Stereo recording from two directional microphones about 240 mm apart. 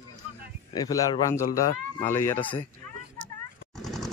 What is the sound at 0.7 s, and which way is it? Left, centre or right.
Speech, centre.